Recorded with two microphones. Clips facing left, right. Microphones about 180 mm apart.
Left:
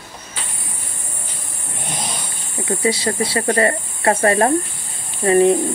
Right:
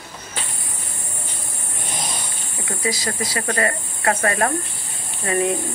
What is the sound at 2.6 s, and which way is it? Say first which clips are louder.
Speech: left 6 dB; 30° left (ahead or behind).